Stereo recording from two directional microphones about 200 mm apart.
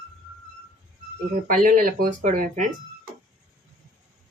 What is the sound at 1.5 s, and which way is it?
Speech, 45° right (ahead or behind).